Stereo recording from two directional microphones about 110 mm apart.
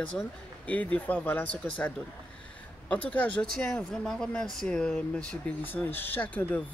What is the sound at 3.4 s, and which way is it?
Speech, 5° left (ahead or behind).